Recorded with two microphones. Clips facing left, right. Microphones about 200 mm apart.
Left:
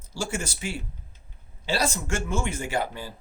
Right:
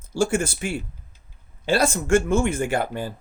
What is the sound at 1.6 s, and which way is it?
Speech, 55° right (ahead or behind).